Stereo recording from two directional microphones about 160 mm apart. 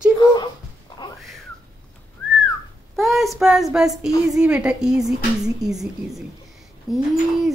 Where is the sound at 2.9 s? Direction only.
Centre (ahead or behind).